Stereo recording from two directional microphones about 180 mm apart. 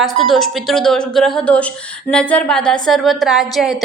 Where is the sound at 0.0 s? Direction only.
Centre (ahead or behind).